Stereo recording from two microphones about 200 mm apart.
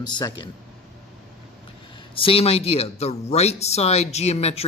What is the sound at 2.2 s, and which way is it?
Speech, 30° left (ahead or behind).